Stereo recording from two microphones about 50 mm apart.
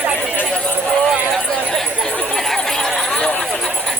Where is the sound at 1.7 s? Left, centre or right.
Centre.